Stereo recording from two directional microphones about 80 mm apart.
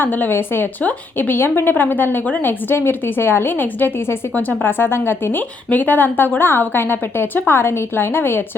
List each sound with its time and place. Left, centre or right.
0.0 s a woman's voice: left